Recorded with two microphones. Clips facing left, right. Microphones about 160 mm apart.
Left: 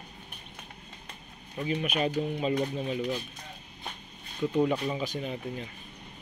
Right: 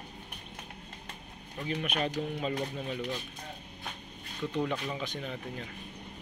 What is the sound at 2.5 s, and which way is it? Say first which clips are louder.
Speech: left 5 dB; 20° left (ahead or behind).